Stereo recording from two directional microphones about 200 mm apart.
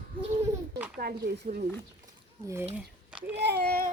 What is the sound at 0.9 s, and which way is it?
Speech, 50° right (ahead or behind).